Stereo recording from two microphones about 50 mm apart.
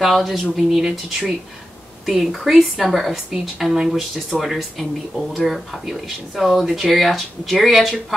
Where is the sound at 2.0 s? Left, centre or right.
Centre.